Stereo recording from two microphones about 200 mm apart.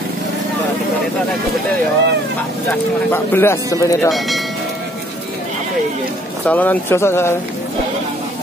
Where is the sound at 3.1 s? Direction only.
10° left (ahead or behind).